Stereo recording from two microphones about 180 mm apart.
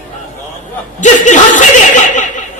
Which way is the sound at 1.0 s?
45° left (ahead or behind).